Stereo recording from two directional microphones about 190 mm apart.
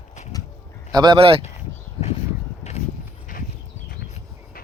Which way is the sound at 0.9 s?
25° right (ahead or behind).